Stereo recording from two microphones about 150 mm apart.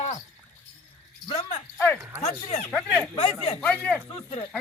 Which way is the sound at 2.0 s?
15° right (ahead or behind).